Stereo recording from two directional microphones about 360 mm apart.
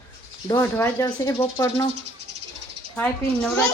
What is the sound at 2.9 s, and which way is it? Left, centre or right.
Speech, centre.